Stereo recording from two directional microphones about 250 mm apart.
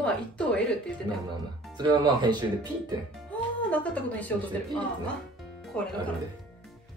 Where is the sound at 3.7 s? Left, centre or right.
Centre.